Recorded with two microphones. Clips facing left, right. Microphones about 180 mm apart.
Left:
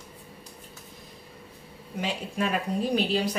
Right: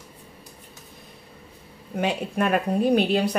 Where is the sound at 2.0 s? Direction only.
60° right (ahead or behind).